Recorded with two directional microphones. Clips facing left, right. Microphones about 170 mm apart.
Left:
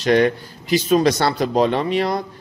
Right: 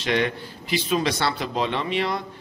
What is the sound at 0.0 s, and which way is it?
A man's voice, 40° left (ahead or behind).